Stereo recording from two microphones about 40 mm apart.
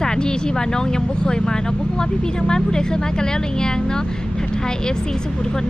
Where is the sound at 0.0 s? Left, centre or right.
Centre.